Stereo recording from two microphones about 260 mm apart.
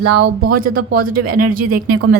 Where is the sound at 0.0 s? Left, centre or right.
Right.